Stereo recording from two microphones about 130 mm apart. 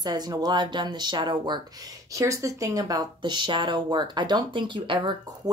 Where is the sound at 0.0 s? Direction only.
30° right (ahead or behind).